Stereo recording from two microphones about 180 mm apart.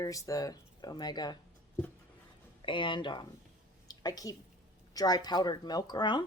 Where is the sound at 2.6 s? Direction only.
25° left (ahead or behind).